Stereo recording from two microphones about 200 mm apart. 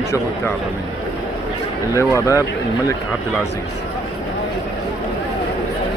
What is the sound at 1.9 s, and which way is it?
Speech, 15° left (ahead or behind).